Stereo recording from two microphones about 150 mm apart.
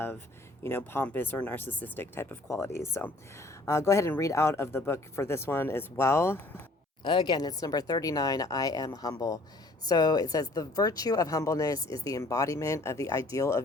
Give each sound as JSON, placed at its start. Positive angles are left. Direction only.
{"t": 0.6, "sound": "speech", "side_deg": 15}
{"t": 7.0, "sound": "speech", "side_deg": 30}